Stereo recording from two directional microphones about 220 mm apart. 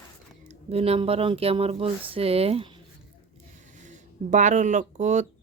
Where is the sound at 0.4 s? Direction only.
30° right (ahead or behind).